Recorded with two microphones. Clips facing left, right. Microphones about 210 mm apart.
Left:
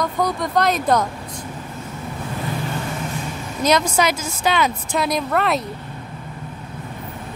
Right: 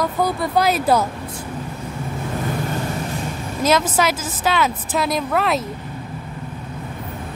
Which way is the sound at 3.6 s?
5° right (ahead or behind).